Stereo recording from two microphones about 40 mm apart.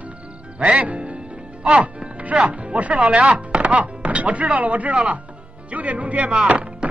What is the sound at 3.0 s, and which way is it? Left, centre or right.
Chopping, right.